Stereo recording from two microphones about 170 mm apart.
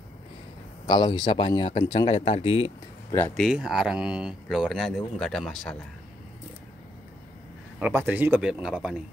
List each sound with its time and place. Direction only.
0.8 s speech: 25° left (ahead or behind)
3.5 s speech: 5° right (ahead or behind)
7.8 s speech: 10° right (ahead or behind)